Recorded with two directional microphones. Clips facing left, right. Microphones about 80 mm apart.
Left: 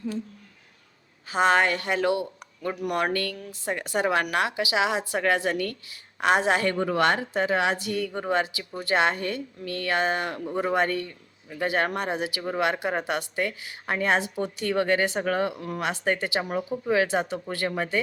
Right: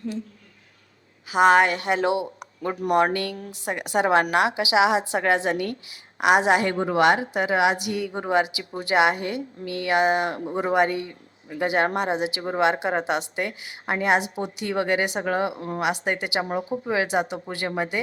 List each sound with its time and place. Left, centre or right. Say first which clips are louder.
1.3 s a woman's voice: right 4 dB; centre
15.8 s a woman's voice: right 1 dB; centre